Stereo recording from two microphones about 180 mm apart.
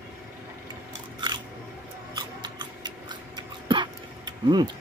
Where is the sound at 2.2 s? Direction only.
25° right (ahead or behind).